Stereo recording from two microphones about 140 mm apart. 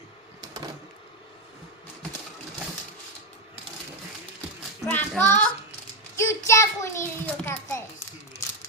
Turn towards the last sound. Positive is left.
turn(degrees=10)  # may be behind; listen again after turning